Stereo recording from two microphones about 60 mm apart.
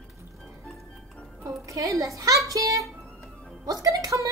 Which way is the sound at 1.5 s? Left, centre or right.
Right.